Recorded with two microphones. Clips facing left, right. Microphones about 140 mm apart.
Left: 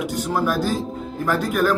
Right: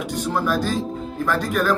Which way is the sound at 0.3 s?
10° left (ahead or behind).